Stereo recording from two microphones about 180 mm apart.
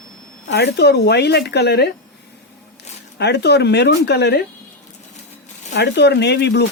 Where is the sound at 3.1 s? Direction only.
65° left (ahead or behind).